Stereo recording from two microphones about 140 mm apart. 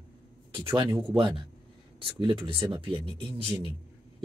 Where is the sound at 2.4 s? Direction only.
40° right (ahead or behind).